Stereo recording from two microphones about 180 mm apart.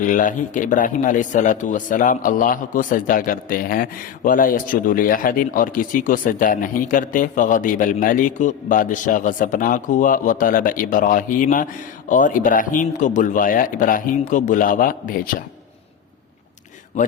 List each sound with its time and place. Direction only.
0.0 s a man's voice: 45° left (ahead or behind)